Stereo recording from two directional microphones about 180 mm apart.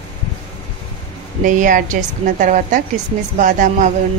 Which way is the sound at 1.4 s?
45° right (ahead or behind).